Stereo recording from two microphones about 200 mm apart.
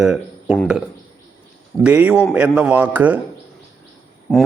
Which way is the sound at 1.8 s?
10° right (ahead or behind).